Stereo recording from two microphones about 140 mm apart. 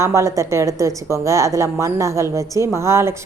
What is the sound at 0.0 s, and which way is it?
A woman's voice, 20° right (ahead or behind).